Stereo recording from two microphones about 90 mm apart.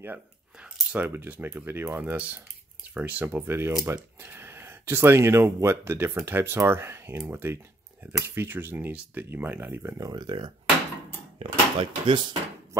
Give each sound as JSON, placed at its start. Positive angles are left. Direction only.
{"t": 0.6, "sound": "speech", "side_deg": -15}
{"t": 9.9, "sound": "speech", "side_deg": -45}